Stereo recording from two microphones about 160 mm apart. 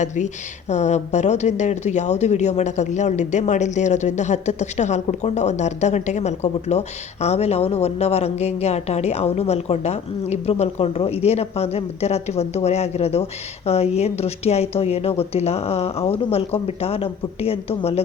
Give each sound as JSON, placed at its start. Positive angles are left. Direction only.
{"t": 0.7, "sound": "speech", "side_deg": 45}